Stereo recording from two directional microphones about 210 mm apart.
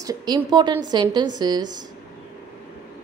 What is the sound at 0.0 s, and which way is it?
A woman's voice, 20° right (ahead or behind).